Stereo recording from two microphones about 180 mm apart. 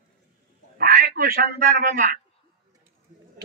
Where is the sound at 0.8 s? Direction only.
55° right (ahead or behind).